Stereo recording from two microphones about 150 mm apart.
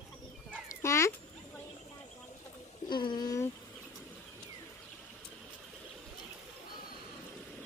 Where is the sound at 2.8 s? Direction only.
30° left (ahead or behind).